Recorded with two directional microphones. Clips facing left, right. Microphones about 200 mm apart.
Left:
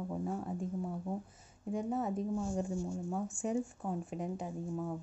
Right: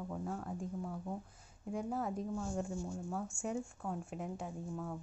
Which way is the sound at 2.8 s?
20° left (ahead or behind).